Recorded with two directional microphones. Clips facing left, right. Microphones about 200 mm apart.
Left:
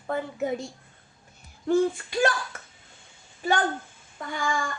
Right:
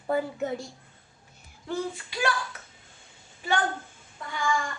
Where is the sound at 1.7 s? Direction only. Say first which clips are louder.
Left 9 dB; 50° left (ahead or behind).